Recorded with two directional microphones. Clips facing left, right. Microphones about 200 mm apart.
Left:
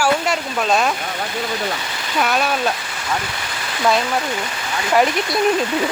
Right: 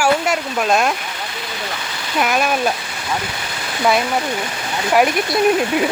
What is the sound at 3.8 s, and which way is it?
Speech, 10° right (ahead or behind).